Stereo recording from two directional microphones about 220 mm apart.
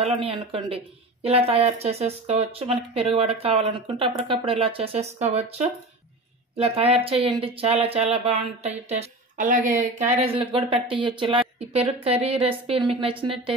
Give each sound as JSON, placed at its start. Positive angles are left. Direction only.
{"t": 0.0, "sound": "speech", "side_deg": -25}